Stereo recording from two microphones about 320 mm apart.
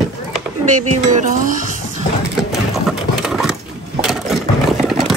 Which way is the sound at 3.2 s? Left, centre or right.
Centre.